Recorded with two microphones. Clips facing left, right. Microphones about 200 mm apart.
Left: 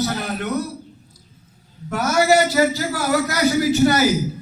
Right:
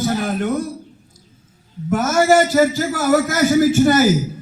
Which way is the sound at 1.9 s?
50° right (ahead or behind).